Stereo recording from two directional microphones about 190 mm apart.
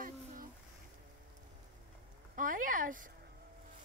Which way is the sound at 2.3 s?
45° right (ahead or behind).